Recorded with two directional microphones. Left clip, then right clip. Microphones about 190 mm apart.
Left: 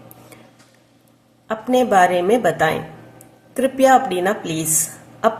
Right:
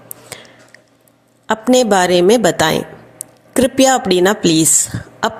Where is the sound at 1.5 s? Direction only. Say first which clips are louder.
Right 4 dB; 50° right (ahead or behind).